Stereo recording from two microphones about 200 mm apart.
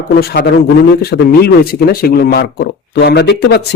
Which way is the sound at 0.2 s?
55° left (ahead or behind).